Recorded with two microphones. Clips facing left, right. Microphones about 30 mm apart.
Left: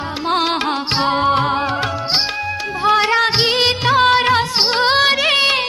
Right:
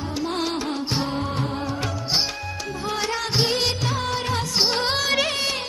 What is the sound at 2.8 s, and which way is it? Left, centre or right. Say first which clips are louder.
Music: left 13 dB; left.